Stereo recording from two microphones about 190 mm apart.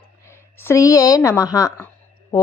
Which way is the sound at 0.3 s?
15° left (ahead or behind).